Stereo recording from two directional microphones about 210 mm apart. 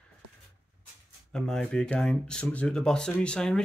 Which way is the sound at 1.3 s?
5° left (ahead or behind).